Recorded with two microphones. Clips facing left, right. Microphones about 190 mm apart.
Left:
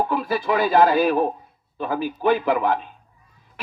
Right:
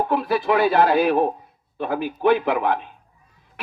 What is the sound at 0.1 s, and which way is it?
A man's voice, 60° right (ahead or behind).